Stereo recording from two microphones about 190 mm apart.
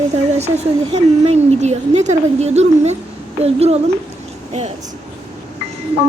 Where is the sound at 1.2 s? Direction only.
35° right (ahead or behind).